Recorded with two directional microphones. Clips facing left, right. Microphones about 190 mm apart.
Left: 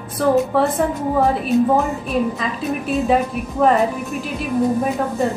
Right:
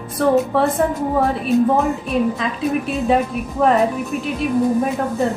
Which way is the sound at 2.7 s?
Centre (ahead or behind).